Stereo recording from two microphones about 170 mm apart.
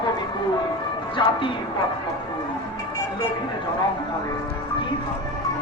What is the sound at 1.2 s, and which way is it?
Speech, 30° left (ahead or behind).